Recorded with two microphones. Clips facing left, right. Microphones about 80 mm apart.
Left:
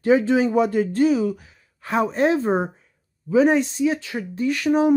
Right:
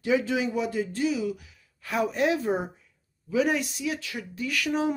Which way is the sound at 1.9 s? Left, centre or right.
Left.